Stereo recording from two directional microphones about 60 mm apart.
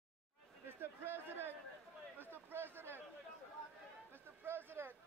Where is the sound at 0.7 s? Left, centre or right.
Right.